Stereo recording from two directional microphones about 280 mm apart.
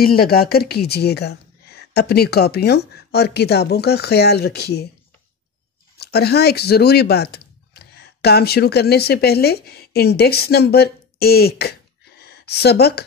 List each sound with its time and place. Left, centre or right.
0.0 s speech: left
5.9 s speech: left